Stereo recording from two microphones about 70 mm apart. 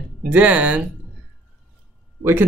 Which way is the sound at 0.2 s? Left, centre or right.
Right.